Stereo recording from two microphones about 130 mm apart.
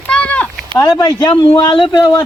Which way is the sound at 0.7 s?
35° left (ahead or behind).